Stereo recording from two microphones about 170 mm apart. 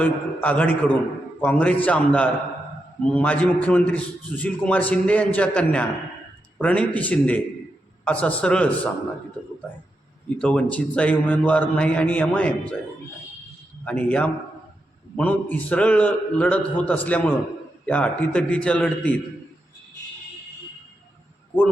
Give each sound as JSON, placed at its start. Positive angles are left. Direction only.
{"t": 0.0, "sound": "a man's voice", "side_deg": 10}
{"t": 10.2, "sound": "a man's voice", "side_deg": 5}
{"t": 13.8, "sound": "a man's voice", "side_deg": 10}